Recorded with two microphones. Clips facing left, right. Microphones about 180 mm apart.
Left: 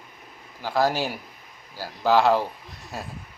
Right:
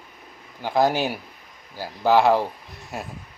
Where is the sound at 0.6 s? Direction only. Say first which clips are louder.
Right 3 dB; 20° right (ahead or behind).